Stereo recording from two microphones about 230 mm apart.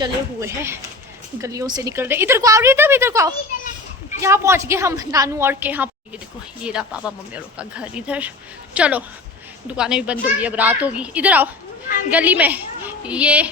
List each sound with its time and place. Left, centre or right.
0.0 s speech: centre